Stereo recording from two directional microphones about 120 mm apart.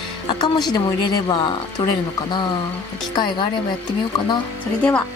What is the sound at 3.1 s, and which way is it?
Speech, 40° left (ahead or behind).